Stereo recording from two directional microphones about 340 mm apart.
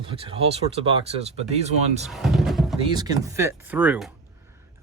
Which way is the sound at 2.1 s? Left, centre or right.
Centre.